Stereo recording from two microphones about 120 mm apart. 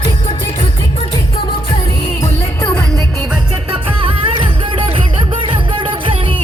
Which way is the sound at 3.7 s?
45° right (ahead or behind).